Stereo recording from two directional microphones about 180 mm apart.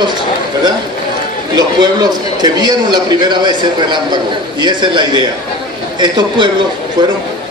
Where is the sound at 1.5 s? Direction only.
20° right (ahead or behind).